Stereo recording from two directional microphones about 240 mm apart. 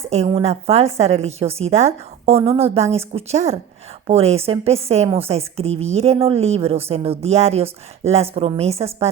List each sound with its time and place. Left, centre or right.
0.1 s a woman's voice: right